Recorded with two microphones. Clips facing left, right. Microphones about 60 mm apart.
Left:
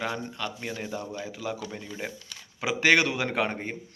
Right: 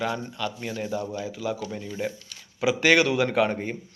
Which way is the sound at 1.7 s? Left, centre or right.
Left.